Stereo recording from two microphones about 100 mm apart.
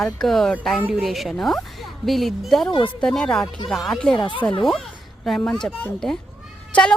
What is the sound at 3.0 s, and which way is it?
A woman's voice, 5° left (ahead or behind).